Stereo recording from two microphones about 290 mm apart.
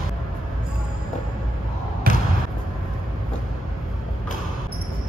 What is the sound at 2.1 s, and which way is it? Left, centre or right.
Basketball bounce, right.